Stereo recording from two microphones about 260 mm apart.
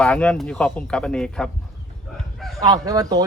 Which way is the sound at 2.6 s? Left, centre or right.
Centre.